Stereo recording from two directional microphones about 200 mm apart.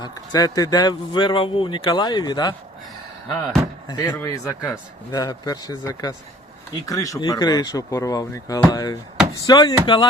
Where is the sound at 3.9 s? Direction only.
20° left (ahead or behind).